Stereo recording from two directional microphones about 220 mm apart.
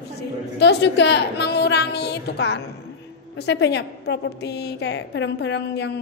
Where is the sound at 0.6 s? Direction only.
50° left (ahead or behind).